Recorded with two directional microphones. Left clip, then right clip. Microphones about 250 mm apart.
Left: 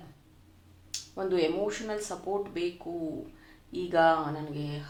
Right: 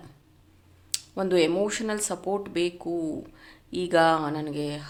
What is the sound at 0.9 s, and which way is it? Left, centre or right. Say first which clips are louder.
Speech: right 6 dB; right.